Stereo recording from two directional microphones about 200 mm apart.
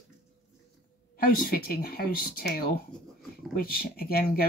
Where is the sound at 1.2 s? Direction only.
45° left (ahead or behind).